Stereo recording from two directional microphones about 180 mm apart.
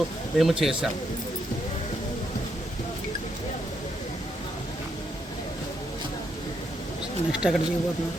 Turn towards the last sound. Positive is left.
turn(degrees=-5)  # may be behind; listen again after turning